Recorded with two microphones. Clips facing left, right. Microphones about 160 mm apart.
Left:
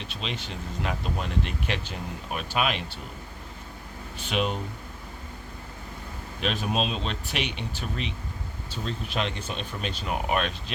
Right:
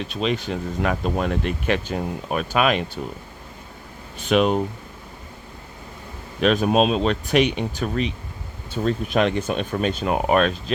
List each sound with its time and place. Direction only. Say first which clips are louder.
0.1 s speech: right 13 dB; 45° right (ahead or behind)
4.3 s speech: right 10 dB; 55° right (ahead or behind)
6.4 s speech: right 10 dB; 50° right (ahead or behind)